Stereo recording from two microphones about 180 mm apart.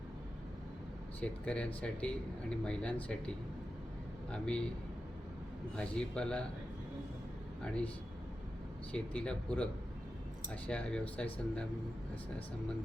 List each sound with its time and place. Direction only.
1.2 s speech: 5° left (ahead or behind)
5.7 s speech: 5° left (ahead or behind)
8.9 s speech: 5° left (ahead or behind)